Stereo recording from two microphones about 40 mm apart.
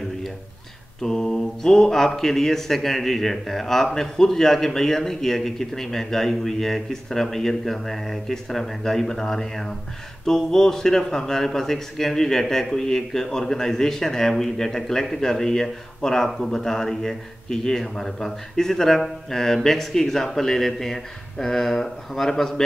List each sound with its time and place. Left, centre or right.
1.0 s speech: centre